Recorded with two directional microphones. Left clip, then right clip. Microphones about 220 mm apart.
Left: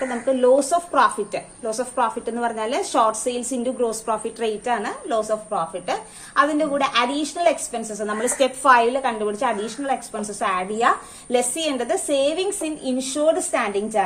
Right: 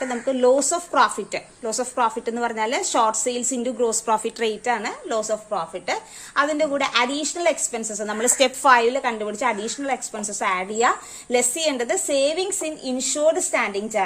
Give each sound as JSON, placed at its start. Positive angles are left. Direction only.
{"t": 0.0, "sound": "a woman's voice", "side_deg": -35}